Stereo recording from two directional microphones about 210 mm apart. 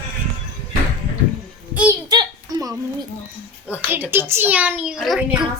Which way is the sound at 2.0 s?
20° right (ahead or behind).